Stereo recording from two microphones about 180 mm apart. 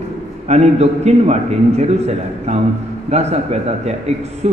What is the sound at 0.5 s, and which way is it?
A man's voice, 35° right (ahead or behind).